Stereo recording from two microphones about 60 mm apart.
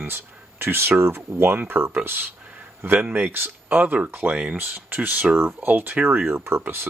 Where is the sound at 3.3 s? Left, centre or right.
Right.